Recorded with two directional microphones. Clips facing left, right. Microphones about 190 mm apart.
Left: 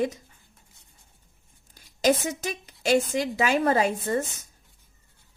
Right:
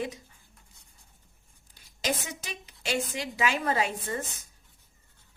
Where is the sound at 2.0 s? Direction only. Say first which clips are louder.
Left 10 dB; 45° left (ahead or behind).